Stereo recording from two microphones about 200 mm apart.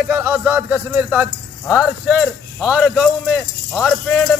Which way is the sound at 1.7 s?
Centre (ahead or behind).